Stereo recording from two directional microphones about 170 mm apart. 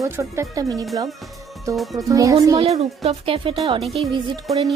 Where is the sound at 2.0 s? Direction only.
20° right (ahead or behind).